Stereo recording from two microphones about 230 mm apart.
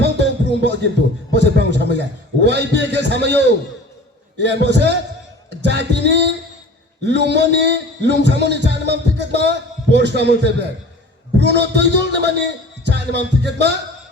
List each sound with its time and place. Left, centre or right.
0.0 s music: right
1.3 s a man's voice: right
4.4 s a man's voice: right
5.5 s music: right
7.0 s a man's voice: right